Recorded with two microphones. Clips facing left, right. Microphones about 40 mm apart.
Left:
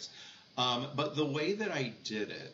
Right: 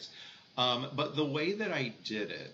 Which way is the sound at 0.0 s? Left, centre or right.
Centre.